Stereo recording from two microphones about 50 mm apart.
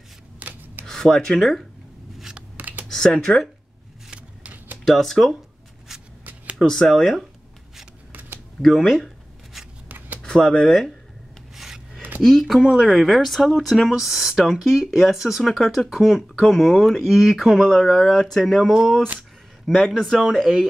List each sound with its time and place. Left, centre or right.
0.4 s rub: right
0.8 s rub: centre
2.5 s computer keyboard: right
2.9 s speech: centre
4.1 s vehicle: right
4.8 s speech: centre
5.9 s shuffling cards: centre
6.6 s speech: centre
8.1 s typing: right
8.6 s a sound: centre
9.8 s shuffling cards: right
10.2 s speech: centre
11.5 s filing: centre
12.2 s a man's voice: centre